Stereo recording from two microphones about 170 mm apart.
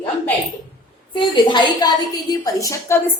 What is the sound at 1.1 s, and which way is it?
A woman's voice, 25° left (ahead or behind).